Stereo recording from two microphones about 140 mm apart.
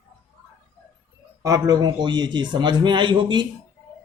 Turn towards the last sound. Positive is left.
turn(degrees=-35)  # may be behind; listen again after turning